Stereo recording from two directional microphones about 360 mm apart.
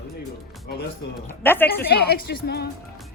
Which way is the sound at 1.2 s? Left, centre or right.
Centre.